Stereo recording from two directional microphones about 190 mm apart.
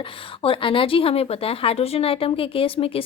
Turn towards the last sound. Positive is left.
turn(degrees=30)  # may be behind; listen again after turning